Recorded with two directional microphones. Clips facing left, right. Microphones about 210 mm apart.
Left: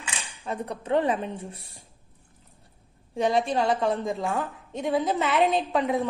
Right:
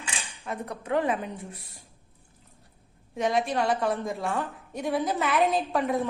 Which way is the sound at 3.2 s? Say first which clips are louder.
Left 2 dB; centre (ahead or behind).